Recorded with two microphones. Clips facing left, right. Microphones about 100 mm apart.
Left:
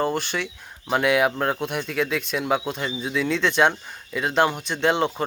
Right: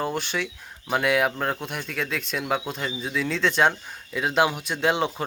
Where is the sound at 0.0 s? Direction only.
Centre (ahead or behind).